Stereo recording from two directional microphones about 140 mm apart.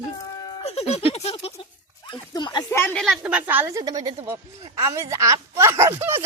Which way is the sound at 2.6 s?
15° left (ahead or behind).